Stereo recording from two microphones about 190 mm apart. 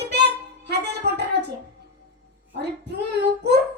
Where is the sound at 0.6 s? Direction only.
60° right (ahead or behind).